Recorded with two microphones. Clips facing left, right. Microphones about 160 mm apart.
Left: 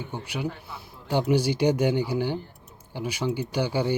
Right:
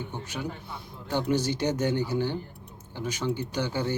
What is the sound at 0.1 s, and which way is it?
Speech, 10° left (ahead or behind).